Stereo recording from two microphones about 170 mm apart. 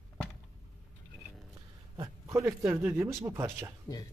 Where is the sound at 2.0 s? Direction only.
20° right (ahead or behind).